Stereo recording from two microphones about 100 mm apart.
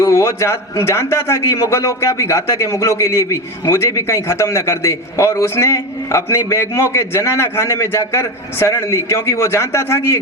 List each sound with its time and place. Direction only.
0.0 s a man's voice: 30° left (ahead or behind)